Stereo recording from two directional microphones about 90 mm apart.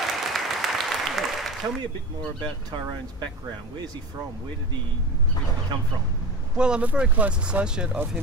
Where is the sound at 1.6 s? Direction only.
40° right (ahead or behind).